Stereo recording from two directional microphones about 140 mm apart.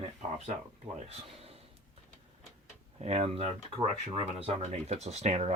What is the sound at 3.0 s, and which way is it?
Speech, 45° right (ahead or behind).